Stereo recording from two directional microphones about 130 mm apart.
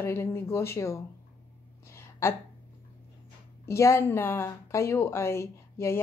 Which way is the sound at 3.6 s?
20° left (ahead or behind).